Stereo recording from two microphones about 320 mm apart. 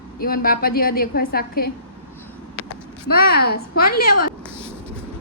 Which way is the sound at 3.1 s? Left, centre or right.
Left.